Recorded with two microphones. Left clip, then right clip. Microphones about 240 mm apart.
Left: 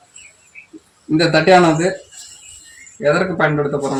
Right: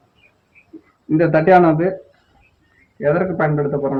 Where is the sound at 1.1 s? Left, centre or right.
Left.